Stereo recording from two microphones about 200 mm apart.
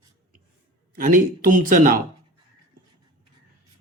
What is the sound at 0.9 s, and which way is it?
Speech, 45° right (ahead or behind).